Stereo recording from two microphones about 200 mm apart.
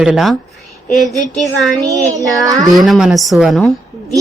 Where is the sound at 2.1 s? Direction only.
15° right (ahead or behind).